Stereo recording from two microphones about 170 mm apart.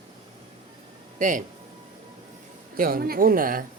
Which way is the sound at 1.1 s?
50° right (ahead or behind).